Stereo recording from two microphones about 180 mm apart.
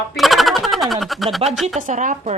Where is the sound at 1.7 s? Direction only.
45° right (ahead or behind).